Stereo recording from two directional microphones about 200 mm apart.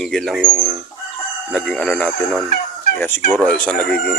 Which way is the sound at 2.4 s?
45° left (ahead or behind).